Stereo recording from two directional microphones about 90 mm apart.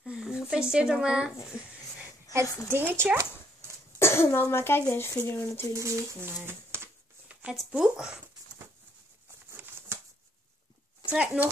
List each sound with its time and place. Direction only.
0.0 s a sound: 10° right (ahead or behind)
2.3 s a woman's voice: 40° left (ahead or behind)
2.7 s speech: 25° right (ahead or behind)
4.0 s speech: 30° left (ahead or behind)
5.7 s speech: 35° right (ahead or behind)
7.5 s speech: 10° right (ahead or behind)
9.5 s a sound: 30° right (ahead or behind)
11.1 s speech: 15° right (ahead or behind)